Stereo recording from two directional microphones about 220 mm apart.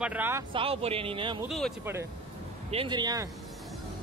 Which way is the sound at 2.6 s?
25° right (ahead or behind).